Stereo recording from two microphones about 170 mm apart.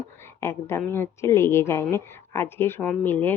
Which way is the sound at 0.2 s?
15° left (ahead or behind).